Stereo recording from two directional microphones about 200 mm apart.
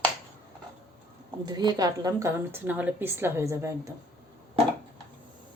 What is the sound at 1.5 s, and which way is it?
A woman's voice, 20° right (ahead or behind).